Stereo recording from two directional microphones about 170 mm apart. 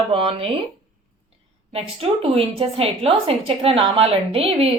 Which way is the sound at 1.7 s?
35° right (ahead or behind).